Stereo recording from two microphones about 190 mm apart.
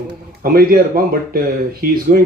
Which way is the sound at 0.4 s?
50° right (ahead or behind).